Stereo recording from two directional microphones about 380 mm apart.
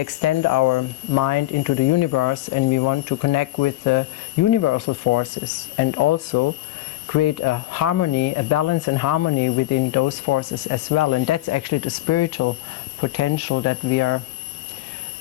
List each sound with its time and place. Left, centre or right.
0.0 s speech: left